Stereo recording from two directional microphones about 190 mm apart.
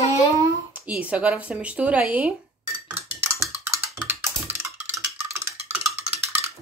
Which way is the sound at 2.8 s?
15° right (ahead or behind).